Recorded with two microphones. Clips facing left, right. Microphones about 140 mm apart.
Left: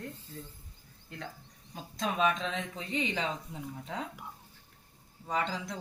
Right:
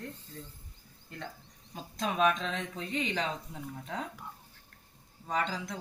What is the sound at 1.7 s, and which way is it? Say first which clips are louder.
Speech: even; centre (ahead or behind).